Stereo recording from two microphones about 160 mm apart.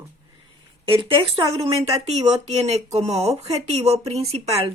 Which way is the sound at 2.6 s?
40° right (ahead or behind).